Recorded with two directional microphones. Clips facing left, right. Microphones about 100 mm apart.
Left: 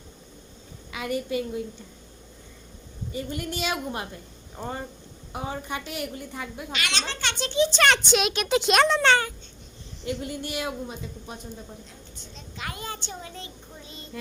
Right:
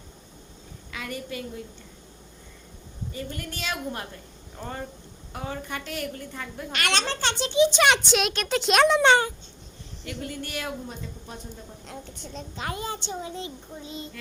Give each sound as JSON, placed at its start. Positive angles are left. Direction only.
{"t": 0.9, "sound": "a woman's voice", "side_deg": 15}
{"t": 3.1, "sound": "a woman's voice", "side_deg": 15}
{"t": 6.7, "sound": "a woman's voice", "side_deg": -50}
{"t": 7.2, "sound": "a child's voice", "side_deg": -30}
{"t": 7.9, "sound": "a child's voice", "side_deg": 0}
{"t": 9.0, "sound": "a child's voice", "side_deg": -20}
{"t": 10.1, "sound": "a woman's voice", "side_deg": 20}
{"t": 11.9, "sound": "a woman's voice", "side_deg": -55}
{"t": 12.5, "sound": "a child's voice", "side_deg": -30}